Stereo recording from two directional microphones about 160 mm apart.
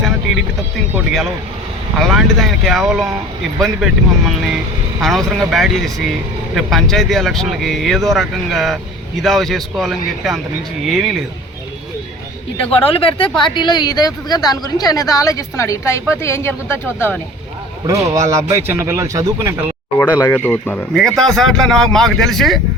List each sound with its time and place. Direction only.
0.9 s speech: centre (ahead or behind)
12.5 s a woman's voice: 35° left (ahead or behind); by 17.2 s 15° left (ahead or behind)
17.8 s speech: 20° right (ahead or behind)
20.0 s speech: 15° left (ahead or behind)